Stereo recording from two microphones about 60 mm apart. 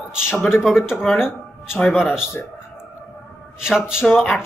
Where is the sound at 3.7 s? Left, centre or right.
Centre.